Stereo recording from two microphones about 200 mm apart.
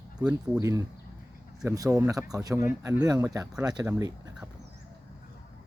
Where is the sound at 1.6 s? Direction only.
15° right (ahead or behind).